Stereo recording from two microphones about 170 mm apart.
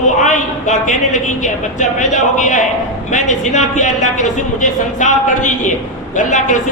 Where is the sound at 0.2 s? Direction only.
45° left (ahead or behind).